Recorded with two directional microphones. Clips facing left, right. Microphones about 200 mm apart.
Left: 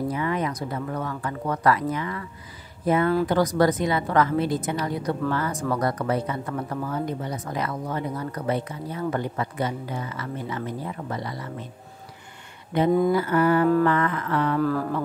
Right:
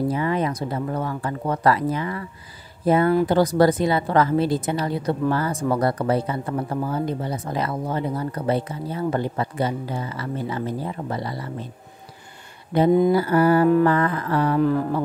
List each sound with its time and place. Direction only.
0.1 s speech: 30° right (ahead or behind)
12.7 s speech: 35° right (ahead or behind)
14.6 s speech: 20° right (ahead or behind)